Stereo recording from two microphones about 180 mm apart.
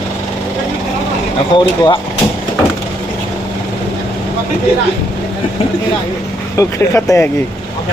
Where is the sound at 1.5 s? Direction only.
25° left (ahead or behind).